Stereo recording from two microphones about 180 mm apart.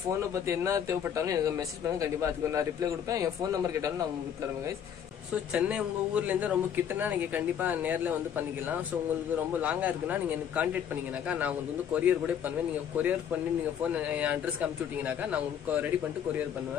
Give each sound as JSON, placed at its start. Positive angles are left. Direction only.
{"t": 0.2, "sound": "speech", "side_deg": -15}
{"t": 5.3, "sound": "speech", "side_deg": -5}